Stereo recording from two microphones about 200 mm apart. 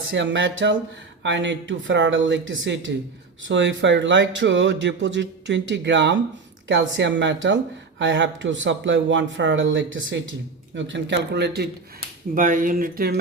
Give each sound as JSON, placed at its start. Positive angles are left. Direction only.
{"t": 0.1, "sound": "speech", "side_deg": -65}
{"t": 12.3, "sound": "speech", "side_deg": -40}